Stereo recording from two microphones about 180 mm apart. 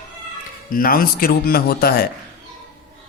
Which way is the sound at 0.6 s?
50° left (ahead or behind).